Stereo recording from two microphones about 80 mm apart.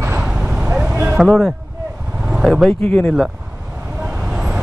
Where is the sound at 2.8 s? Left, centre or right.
Left.